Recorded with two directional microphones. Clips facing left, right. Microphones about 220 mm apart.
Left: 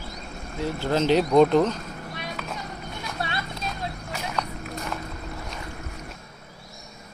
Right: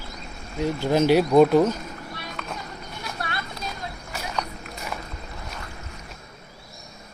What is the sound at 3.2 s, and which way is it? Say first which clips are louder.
Clip-clop: left 2 dB; 25° left (ahead or behind).